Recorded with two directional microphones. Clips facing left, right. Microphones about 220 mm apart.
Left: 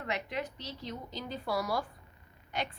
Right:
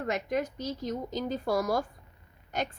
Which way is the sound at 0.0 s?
45° right (ahead or behind).